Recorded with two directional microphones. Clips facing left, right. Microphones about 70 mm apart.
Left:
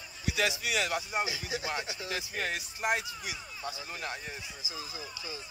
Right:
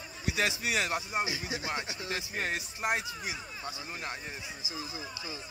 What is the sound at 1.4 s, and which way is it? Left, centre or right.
Speech, right.